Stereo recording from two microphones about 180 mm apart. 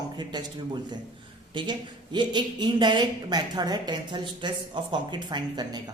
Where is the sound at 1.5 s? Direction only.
25° right (ahead or behind).